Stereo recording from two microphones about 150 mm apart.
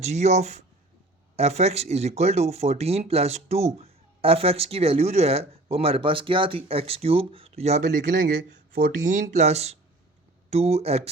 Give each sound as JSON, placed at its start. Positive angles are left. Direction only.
{"t": 0.0, "sound": "speech", "side_deg": -50}